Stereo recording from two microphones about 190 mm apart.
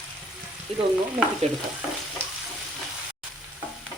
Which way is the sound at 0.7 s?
30° right (ahead or behind).